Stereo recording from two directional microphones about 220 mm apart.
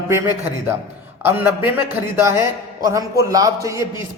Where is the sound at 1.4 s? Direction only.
10° right (ahead or behind).